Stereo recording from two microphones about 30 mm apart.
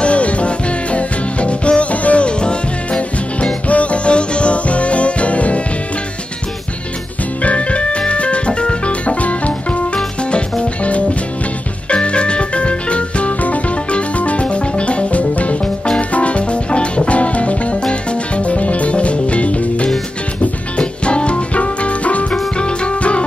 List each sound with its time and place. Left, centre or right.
0.0 s music: left
3.6 s music: left
7.5 s music: left
11.9 s organ: left
13.9 s music: left
20.7 s music: left
22.3 s music: left